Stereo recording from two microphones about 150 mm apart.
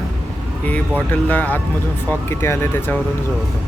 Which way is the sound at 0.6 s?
10° left (ahead or behind).